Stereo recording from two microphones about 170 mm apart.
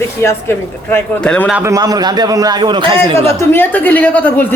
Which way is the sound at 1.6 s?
20° right (ahead or behind).